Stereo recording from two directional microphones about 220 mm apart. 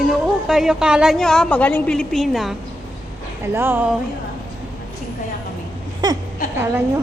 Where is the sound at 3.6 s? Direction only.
10° right (ahead or behind).